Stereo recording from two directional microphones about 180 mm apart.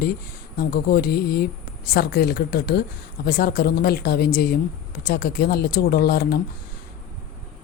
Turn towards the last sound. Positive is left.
turn(degrees=60)  # may be behind; listen again after turning